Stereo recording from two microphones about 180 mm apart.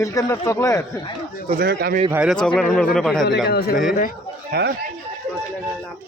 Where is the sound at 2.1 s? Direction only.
5° right (ahead or behind).